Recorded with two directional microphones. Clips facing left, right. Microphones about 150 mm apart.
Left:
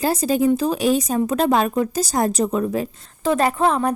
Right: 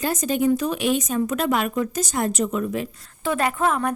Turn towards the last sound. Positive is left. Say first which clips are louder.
# left 4 dB
turn(degrees=30)  # may be behind; listen again after turning